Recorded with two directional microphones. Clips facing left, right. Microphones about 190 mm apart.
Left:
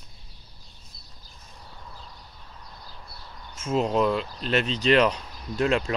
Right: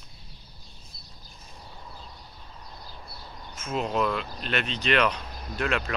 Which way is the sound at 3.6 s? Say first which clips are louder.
Left 4 dB; 25° left (ahead or behind).